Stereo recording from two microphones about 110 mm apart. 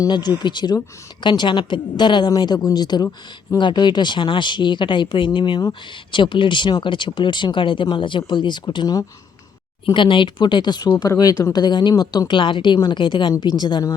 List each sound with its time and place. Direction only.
0.0 s speech: 40° left (ahead or behind)